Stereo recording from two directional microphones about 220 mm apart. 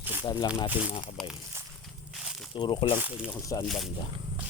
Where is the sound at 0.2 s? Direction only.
20° left (ahead or behind).